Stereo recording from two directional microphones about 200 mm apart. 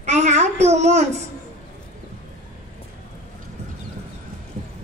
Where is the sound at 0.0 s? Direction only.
35° right (ahead or behind).